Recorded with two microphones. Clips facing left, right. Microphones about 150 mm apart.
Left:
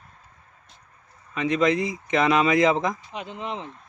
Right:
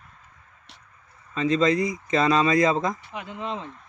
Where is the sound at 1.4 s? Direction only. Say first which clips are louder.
Right 1 dB; 15° left (ahead or behind).